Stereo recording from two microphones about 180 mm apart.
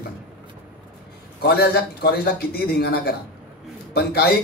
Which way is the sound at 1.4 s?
60° left (ahead or behind).